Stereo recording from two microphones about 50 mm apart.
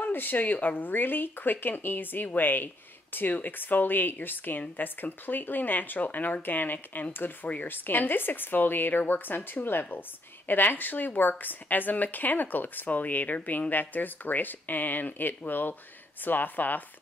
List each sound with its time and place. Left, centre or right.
0.0 s speech: left